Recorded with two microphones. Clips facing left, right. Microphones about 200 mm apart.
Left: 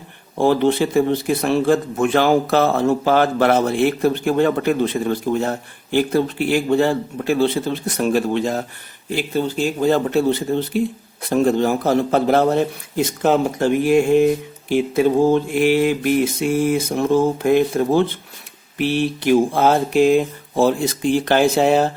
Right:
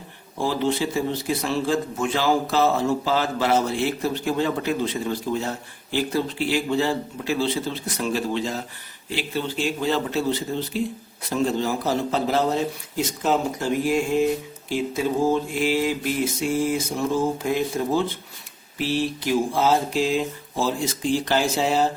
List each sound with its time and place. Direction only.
0.3 s a man's voice: 60° left (ahead or behind)